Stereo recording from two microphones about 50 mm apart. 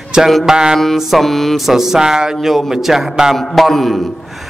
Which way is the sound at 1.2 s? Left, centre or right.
Centre.